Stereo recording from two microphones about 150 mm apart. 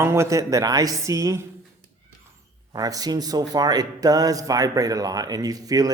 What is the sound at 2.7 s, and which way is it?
Speech, 25° right (ahead or behind).